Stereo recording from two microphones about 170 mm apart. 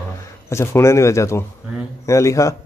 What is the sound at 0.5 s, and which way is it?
A man's voice, 15° left (ahead or behind).